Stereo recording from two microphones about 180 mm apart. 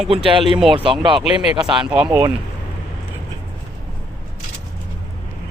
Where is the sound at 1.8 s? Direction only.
10° right (ahead or behind).